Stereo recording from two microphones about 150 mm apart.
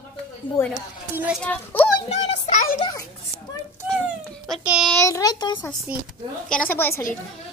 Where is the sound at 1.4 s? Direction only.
10° left (ahead or behind).